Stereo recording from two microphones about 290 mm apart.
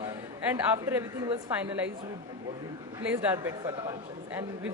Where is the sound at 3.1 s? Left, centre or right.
Centre.